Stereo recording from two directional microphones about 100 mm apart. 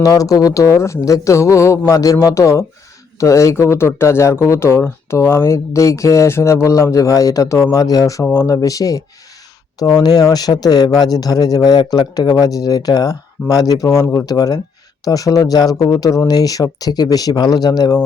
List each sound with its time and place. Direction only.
0.0 s speech: 35° left (ahead or behind)
8.2 s speech: 25° left (ahead or behind)
8.4 s speech: 35° left (ahead or behind)